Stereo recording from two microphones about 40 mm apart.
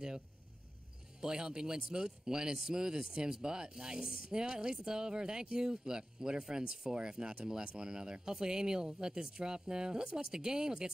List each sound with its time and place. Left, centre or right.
1.2 s a man's voice: centre